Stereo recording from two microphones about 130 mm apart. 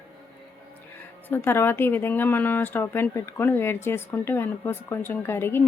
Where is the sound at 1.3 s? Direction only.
15° left (ahead or behind).